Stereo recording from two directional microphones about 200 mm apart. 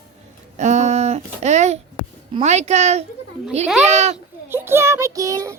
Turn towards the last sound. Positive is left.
turn(degrees=-15)  # may be behind; listen again after turning